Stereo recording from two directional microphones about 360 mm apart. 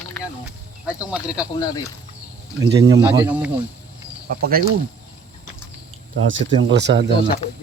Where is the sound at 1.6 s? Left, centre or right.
Centre.